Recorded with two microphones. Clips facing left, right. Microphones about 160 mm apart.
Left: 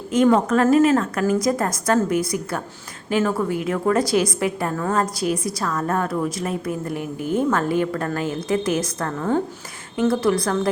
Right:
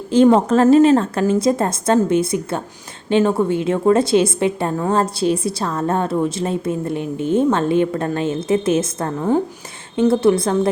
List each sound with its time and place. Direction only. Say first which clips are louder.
0.1 s a woman's voice: right 4 dB; 30° right (ahead or behind)